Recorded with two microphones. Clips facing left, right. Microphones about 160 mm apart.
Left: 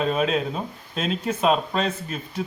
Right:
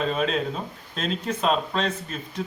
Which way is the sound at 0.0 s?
5° left (ahead or behind).